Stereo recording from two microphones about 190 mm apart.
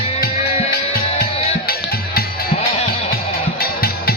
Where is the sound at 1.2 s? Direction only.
50° left (ahead or behind).